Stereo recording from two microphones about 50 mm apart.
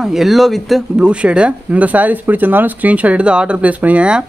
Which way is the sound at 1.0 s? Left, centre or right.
Right.